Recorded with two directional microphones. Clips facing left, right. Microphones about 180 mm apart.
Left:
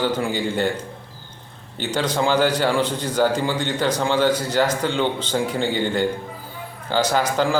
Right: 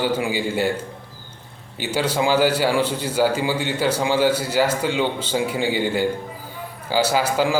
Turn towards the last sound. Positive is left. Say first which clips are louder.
# even
turn(degrees=-10)  # may be behind; listen again after turning